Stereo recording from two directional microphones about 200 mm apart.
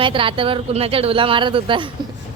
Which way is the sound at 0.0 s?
25° right (ahead or behind).